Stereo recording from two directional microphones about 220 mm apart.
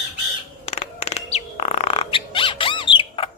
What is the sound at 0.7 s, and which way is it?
Squawk, 30° left (ahead or behind).